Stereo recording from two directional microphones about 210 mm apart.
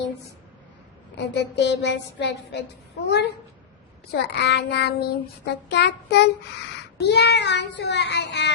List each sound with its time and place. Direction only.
1.1 s a child's voice: 55° left (ahead or behind)
4.1 s child singing: 50° left (ahead or behind)
7.0 s a child's voice: 55° left (ahead or behind)